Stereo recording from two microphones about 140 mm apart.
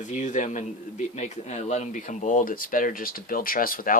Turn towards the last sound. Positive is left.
turn(degrees=90)